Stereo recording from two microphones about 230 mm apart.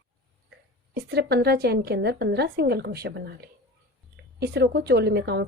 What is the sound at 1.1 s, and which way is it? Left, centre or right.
Speech, right.